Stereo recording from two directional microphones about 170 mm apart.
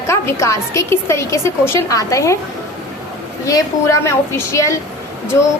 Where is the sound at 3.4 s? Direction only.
20° left (ahead or behind).